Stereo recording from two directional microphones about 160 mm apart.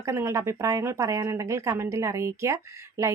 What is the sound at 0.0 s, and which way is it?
A woman's voice, 15° right (ahead or behind).